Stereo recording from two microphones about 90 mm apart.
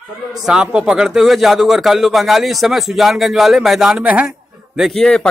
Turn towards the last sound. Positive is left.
turn(degrees=0)  # may be behind; listen again after turning